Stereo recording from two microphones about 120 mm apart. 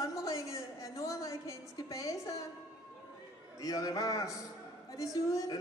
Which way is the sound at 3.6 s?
30° left (ahead or behind).